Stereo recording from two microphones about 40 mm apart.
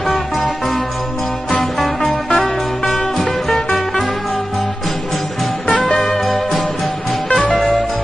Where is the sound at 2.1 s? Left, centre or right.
Left.